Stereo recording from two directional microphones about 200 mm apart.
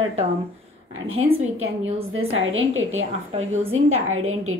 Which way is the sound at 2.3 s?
80° right.